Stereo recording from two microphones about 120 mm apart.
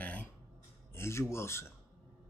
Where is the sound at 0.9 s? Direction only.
20° left (ahead or behind).